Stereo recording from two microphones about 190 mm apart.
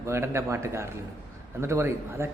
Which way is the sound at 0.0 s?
15° right (ahead or behind).